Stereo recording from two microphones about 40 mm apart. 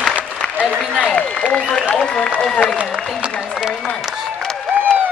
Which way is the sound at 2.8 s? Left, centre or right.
Right.